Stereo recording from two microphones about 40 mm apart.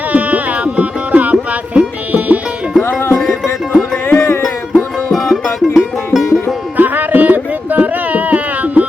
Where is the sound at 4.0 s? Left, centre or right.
Left.